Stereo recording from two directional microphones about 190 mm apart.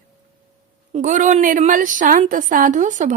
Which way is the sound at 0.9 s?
40° right (ahead or behind).